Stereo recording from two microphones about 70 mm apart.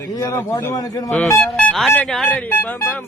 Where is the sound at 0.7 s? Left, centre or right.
Left.